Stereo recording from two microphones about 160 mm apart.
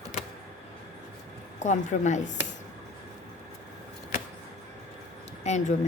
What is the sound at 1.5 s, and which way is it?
Speech, 50° left (ahead or behind).